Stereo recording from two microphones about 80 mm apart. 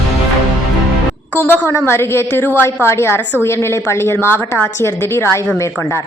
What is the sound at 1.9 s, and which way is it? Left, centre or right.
A woman's voice, left.